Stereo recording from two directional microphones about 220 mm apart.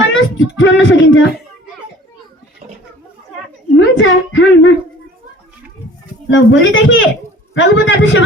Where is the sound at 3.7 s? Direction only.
60° left (ahead or behind).